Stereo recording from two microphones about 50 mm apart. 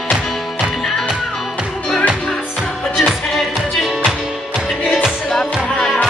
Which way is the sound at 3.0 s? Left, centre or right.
Centre.